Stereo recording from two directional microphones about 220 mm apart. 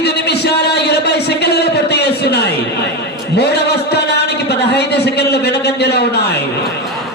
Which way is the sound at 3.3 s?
50° left (ahead or behind).